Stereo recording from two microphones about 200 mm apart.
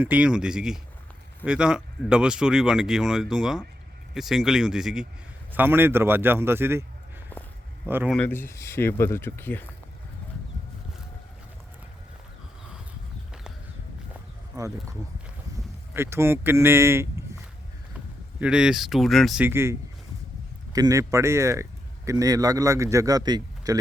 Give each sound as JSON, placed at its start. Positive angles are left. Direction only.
{"t": 0.0, "sound": "a man's voice", "side_deg": -5}
{"t": 7.9, "sound": "a man's voice", "side_deg": -10}
{"t": 8.1, "sound": "speech", "side_deg": 10}
{"t": 14.5, "sound": "a man's voice", "side_deg": -15}
{"t": 18.3, "sound": "speech", "side_deg": -5}
{"t": 20.7, "sound": "speech", "side_deg": -15}